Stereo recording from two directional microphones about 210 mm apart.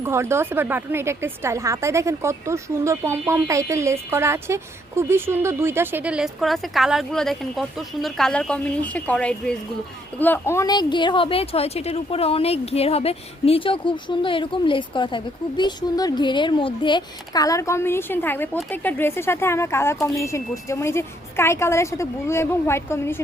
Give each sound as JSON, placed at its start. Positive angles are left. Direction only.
{"t": 0.0, "sound": "a woman's voice", "side_deg": -10}